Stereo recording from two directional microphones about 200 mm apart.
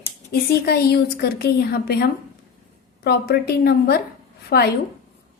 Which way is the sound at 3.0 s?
55° left (ahead or behind).